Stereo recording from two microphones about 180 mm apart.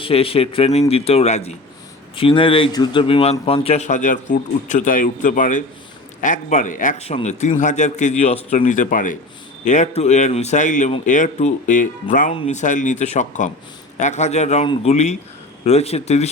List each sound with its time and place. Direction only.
0.0 s a man's voice: 30° left (ahead or behind); by 11.9 s 45° left (ahead or behind)
12.3 s a man's voice: 35° left (ahead or behind)